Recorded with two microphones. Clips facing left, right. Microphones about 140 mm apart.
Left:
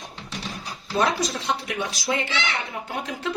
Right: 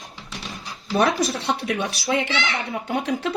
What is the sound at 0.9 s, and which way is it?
Speech, 65° right (ahead or behind).